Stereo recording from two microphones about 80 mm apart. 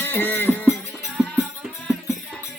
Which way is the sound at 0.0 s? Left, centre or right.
Left.